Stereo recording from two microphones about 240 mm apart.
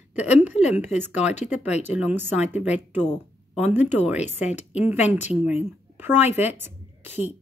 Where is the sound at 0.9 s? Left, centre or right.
Centre.